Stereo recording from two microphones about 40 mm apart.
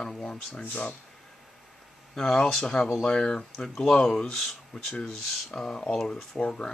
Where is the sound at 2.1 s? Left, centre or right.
Centre.